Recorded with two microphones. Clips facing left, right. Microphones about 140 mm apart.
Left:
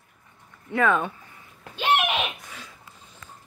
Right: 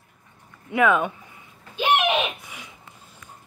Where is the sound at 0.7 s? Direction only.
10° right (ahead or behind).